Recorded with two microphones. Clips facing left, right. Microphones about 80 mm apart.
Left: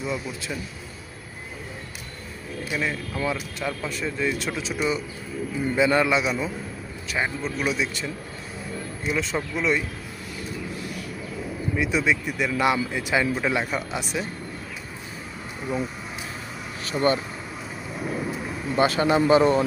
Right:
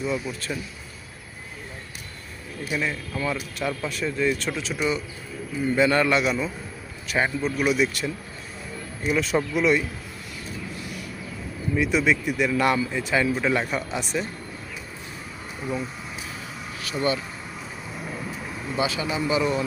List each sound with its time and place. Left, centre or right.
0.0 s speech: centre
2.7 s speech: centre
7.4 s speech: centre
11.8 s speech: centre
15.6 s speech: centre
16.9 s speech: left
18.8 s speech: left
19.3 s speech: left